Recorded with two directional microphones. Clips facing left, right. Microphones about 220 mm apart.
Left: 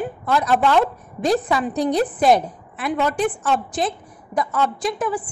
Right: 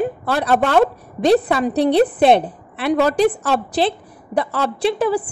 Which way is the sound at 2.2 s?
25° right (ahead or behind).